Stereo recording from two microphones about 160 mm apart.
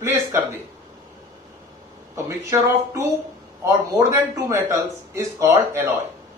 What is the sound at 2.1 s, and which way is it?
A man's voice, 20° right (ahead or behind).